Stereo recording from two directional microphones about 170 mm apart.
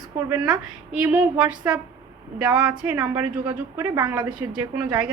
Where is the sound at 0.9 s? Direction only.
10° right (ahead or behind).